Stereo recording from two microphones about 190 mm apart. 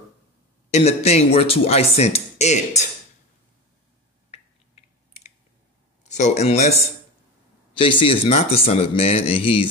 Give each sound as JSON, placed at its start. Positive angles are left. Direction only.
{"t": 0.7, "sound": "speech", "side_deg": 35}
{"t": 4.3, "sound": "a sound", "side_deg": 35}
{"t": 6.0, "sound": "a man's voice", "side_deg": 40}